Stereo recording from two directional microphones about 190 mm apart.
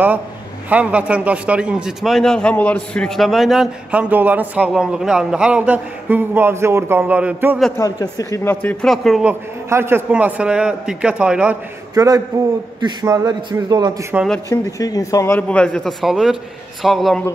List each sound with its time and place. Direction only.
0.7 s a man's voice: 5° right (ahead or behind)
7.7 s a man's voice: 20° left (ahead or behind)
8.8 s a man's voice: centre (ahead or behind)
11.9 s a man's voice: 20° right (ahead or behind)
14.1 s a man's voice: centre (ahead or behind)
14.5 s a man's voice: 20° left (ahead or behind); by 17.2 s centre (ahead or behind)